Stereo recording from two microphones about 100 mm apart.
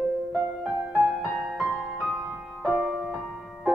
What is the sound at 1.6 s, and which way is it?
Music, 20° right (ahead or behind).